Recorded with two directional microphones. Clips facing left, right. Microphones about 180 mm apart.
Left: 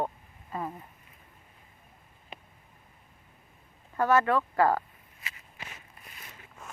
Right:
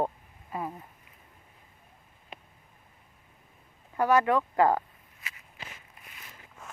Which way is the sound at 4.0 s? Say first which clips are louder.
Right 1 dB; 15° right (ahead or behind).